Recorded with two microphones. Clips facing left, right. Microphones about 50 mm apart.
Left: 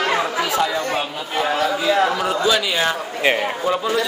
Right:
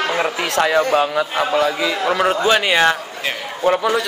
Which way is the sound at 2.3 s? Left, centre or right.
Right.